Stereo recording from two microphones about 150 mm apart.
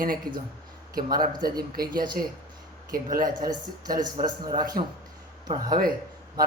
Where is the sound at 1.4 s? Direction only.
85° right.